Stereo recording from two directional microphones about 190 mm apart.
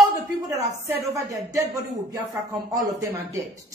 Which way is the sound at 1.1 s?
20° right (ahead or behind).